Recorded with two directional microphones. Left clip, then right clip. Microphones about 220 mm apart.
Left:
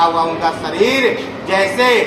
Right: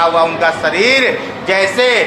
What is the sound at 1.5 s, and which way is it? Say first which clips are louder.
Speech: right 1 dB; 25° right (ahead or behind).